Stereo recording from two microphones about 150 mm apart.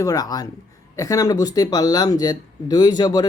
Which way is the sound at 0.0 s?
25° left (ahead or behind).